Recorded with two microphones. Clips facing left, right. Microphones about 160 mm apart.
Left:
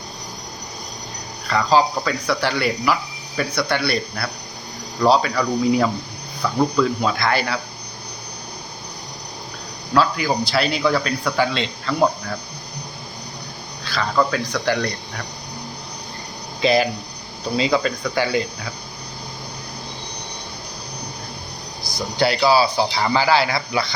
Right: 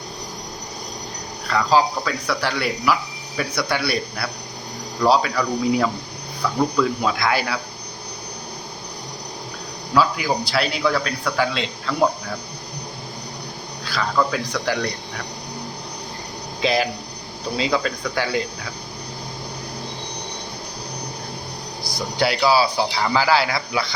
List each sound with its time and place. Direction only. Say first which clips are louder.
1.5 s speech: left 1 dB; centre (ahead or behind)
9.9 s speech: left 1 dB; 5° right (ahead or behind)
13.8 s speech: left 1 dB; 5° right (ahead or behind)
16.6 s speech: left 3 dB; centre (ahead or behind)
22.4 s speech: left 1 dB; centre (ahead or behind)